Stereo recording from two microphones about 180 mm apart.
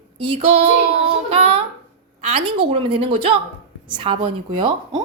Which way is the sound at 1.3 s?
35° right (ahead or behind).